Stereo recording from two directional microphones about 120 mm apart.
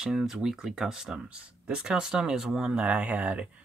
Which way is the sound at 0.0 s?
5° right (ahead or behind).